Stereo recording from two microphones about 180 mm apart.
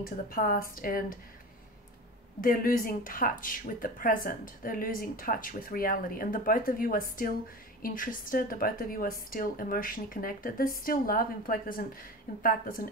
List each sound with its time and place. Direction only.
0.0 s a woman's voice: 55° left (ahead or behind)
2.4 s a woman's voice: 50° left (ahead or behind)